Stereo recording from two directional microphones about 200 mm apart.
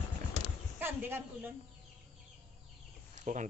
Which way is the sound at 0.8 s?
10° right (ahead or behind).